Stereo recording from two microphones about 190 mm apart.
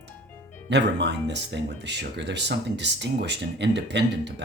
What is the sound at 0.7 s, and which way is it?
Speech, 65° right (ahead or behind).